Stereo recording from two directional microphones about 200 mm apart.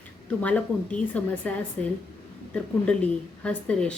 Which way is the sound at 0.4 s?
5° left (ahead or behind).